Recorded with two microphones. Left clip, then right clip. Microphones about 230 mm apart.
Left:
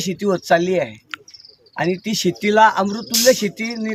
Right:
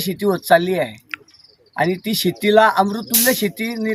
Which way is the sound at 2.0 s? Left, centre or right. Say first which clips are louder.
Right 1 dB; centre.